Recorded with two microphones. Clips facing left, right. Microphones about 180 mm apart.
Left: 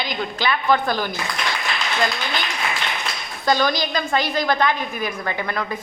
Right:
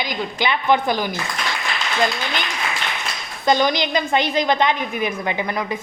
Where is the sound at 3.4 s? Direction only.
20° right (ahead or behind).